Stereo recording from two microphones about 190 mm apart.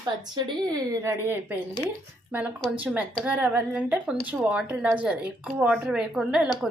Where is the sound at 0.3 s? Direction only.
20° right (ahead or behind).